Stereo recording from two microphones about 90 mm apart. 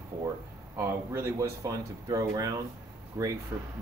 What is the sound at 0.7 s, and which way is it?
Speech, 30° right (ahead or behind).